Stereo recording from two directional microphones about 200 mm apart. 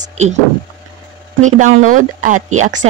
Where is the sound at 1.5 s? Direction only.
40° right (ahead or behind).